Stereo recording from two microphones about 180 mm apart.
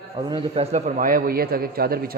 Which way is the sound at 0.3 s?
30° right (ahead or behind).